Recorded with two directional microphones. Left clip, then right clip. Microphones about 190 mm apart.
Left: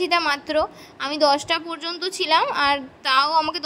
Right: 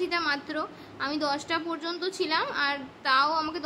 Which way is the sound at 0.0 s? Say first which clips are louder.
Left 7 dB; 45° left (ahead or behind).